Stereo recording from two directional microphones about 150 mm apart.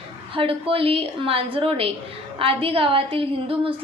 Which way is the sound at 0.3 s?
35° right (ahead or behind).